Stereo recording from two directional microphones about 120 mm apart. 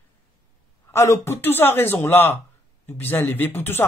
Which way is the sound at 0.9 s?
25° left (ahead or behind).